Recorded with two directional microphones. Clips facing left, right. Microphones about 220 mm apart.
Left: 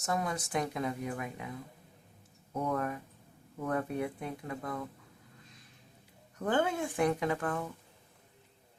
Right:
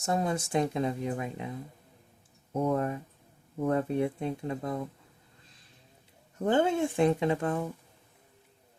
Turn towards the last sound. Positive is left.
turn(degrees=-25)  # may be behind; listen again after turning